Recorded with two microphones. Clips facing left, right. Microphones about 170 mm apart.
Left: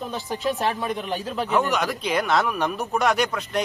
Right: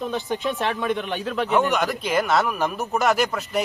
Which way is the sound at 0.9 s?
40° left (ahead or behind).